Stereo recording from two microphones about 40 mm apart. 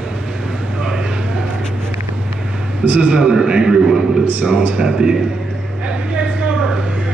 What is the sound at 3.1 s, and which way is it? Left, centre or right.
Speech, centre.